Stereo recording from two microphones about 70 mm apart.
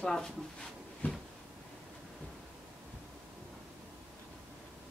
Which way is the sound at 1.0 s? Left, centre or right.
Left.